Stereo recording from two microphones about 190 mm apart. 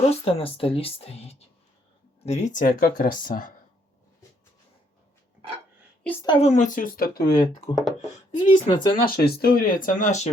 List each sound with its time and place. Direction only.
0.1 s speech: 30° left (ahead or behind)
6.2 s speech: 30° left (ahead or behind); by 7.2 s 50° left (ahead or behind)
7.3 s speech: 20° left (ahead or behind)
9.0 s speech: 55° left (ahead or behind); by 10.3 s 40° left (ahead or behind)